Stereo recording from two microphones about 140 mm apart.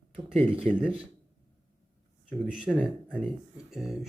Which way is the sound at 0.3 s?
45° right (ahead or behind).